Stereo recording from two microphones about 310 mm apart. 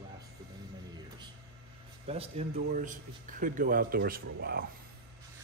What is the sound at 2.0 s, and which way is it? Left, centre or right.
Speech, centre.